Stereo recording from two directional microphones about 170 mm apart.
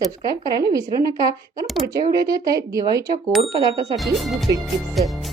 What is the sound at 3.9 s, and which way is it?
Music, centre (ahead or behind).